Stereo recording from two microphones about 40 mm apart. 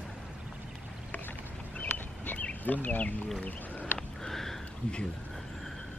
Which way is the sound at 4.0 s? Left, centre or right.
Centre.